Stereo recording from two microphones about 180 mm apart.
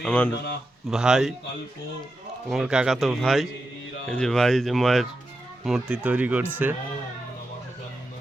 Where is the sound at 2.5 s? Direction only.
5° right (ahead or behind).